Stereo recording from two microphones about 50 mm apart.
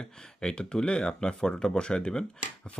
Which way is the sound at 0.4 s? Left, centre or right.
Centre.